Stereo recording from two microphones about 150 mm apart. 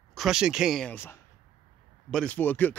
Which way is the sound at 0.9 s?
15° left (ahead or behind).